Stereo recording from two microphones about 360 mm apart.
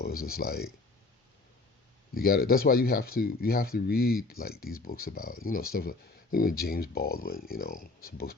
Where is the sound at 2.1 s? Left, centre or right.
Left.